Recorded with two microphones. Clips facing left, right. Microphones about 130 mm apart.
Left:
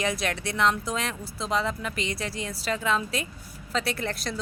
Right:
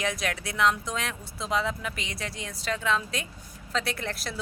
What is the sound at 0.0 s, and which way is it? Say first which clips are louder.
A woman's voice: left 2 dB; centre (ahead or behind).